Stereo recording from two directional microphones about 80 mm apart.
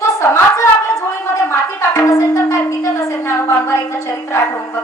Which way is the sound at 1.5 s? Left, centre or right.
Left.